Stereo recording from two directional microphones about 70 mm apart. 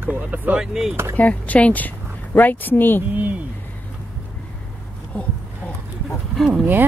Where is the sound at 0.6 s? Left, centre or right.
Centre.